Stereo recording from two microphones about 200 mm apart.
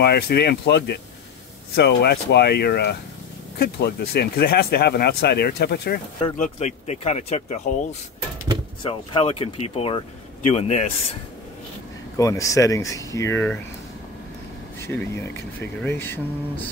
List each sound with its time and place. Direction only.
0.0 s speech: 55° left (ahead or behind)
6.3 s speech: 35° left (ahead or behind)
8.8 s speech: 25° left (ahead or behind)
12.2 s speech: 15° left (ahead or behind)
14.8 s speech: 10° left (ahead or behind)